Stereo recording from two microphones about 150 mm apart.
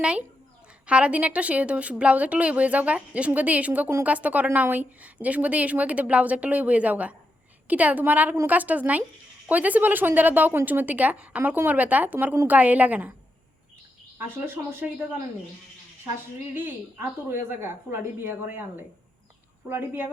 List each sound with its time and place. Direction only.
0.0 s a woman's voice: 5° right (ahead or behind)
14.2 s a woman's voice: 15° right (ahead or behind)
16.6 s a woman's voice: 15° right (ahead or behind)
19.6 s a woman's voice: 15° right (ahead or behind)